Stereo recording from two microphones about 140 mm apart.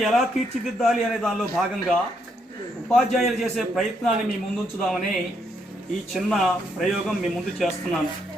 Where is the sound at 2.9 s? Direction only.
Centre (ahead or behind).